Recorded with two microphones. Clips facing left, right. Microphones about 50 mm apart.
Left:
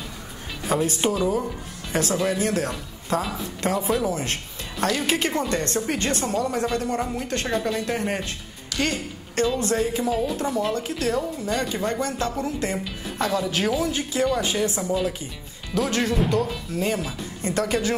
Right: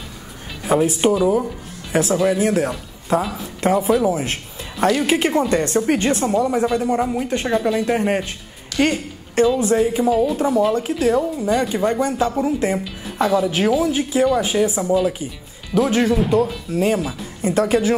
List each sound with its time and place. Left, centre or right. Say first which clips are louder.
0.7 s a woman's voice: right 6 dB; centre
8.7 s a sound: right 7 dB; centre
9.5 s a woman's voice: right 6 dB; centre